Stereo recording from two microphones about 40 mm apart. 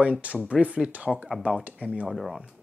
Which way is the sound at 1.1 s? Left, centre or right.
Centre.